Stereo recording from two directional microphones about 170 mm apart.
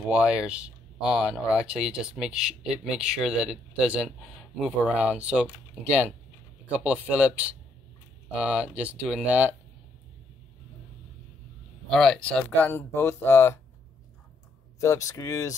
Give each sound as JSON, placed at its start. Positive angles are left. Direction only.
{"t": 0.1, "sound": "speech", "side_deg": -5}
{"t": 11.9, "sound": "speech", "side_deg": 5}
{"t": 14.8, "sound": "speech", "side_deg": 15}